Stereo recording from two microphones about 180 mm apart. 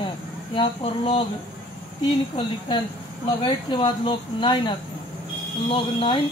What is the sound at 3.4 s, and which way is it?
Speech, 30° left (ahead or behind).